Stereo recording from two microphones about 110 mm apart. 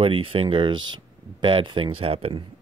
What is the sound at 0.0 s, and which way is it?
Speech, 55° right (ahead or behind).